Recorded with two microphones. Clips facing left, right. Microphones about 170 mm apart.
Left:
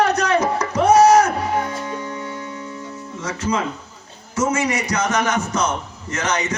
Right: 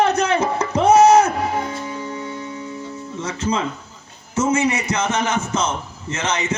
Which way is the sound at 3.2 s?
30° right (ahead or behind).